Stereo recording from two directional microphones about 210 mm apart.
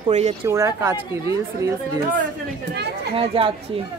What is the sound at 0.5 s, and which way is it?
Speech, 15° right (ahead or behind).